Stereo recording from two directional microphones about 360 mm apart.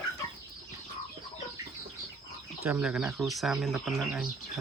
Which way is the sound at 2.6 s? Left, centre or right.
Centre.